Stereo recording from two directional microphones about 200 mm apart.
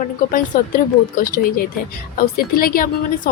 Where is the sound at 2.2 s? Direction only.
45° left (ahead or behind).